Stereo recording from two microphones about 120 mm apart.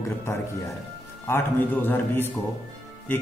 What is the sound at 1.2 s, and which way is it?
Speech, 20° left (ahead or behind).